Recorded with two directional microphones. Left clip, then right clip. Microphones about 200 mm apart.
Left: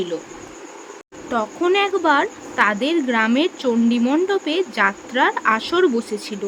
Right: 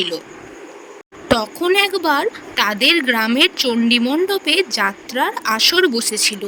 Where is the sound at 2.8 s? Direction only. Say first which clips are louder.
Right 6 dB; 45° right (ahead or behind).